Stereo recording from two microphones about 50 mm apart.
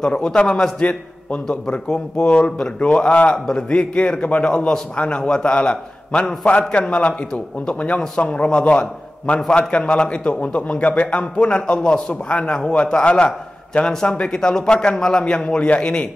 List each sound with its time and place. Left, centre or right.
0.0 s a man's voice: centre